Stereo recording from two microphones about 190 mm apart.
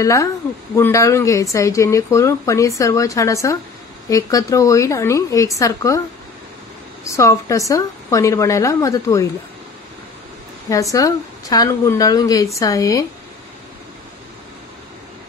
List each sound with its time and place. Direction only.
0.0 s a woman's voice: 20° left (ahead or behind)
7.1 s a woman's voice: 15° left (ahead or behind)
10.7 s a woman's voice: 15° left (ahead or behind)